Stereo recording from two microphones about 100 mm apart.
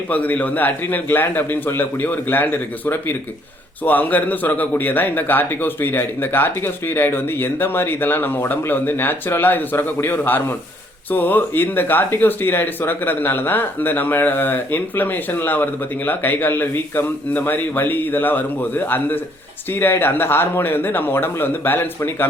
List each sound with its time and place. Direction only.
0.1 s speech: 15° left (ahead or behind)